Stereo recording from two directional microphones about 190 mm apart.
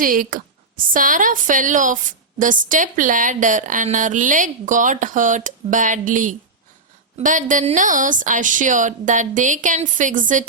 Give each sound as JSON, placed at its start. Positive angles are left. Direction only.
{"t": 0.0, "sound": "a woman's voice", "side_deg": -45}